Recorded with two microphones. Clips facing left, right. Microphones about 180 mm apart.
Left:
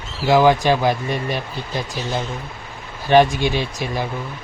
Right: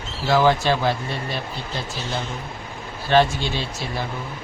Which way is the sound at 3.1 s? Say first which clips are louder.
Left 4 dB; 15° left (ahead or behind).